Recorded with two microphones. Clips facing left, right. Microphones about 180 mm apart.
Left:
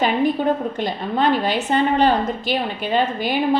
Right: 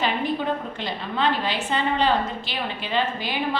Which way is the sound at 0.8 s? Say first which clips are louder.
Left 5 dB; 45° left (ahead or behind).